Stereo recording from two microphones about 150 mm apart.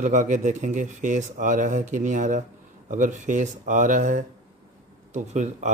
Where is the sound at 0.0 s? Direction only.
55° right (ahead or behind).